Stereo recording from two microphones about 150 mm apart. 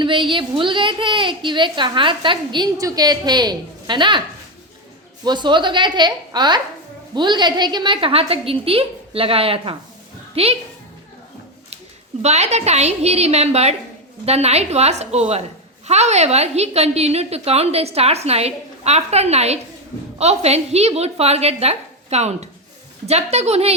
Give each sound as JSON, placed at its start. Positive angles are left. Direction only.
{"t": 0.0, "sound": "a woman's voice", "side_deg": -35}
{"t": 5.2, "sound": "a woman's voice", "side_deg": -30}
{"t": 12.2, "sound": "a woman's voice", "side_deg": -45}